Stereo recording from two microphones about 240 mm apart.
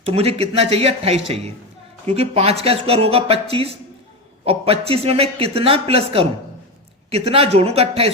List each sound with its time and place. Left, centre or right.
0.0 s speech: right